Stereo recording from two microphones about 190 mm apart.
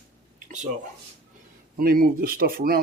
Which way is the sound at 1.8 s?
50° right (ahead or behind).